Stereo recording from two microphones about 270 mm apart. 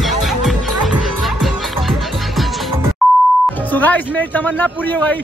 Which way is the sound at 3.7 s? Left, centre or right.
Centre.